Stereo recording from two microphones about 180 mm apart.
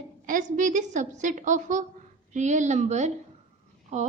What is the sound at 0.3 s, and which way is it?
A woman's voice, 45° right (ahead or behind).